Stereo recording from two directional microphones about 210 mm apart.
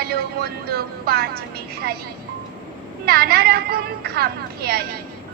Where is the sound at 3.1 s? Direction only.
45° right (ahead or behind).